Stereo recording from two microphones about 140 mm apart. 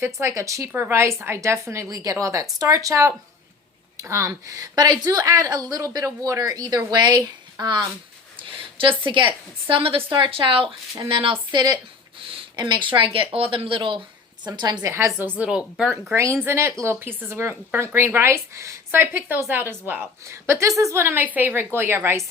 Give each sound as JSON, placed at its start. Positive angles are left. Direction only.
{"t": 0.0, "sound": "a woman's voice", "side_deg": -20}
{"t": 15.2, "sound": "speech", "side_deg": -10}
{"t": 16.1, "sound": "speech", "side_deg": -20}